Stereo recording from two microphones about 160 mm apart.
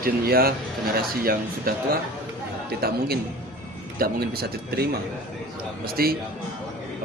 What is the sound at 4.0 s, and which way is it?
Speech, 65° right (ahead or behind).